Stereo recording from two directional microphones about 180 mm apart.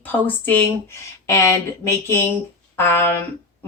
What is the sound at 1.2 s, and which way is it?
Speech, 15° left (ahead or behind).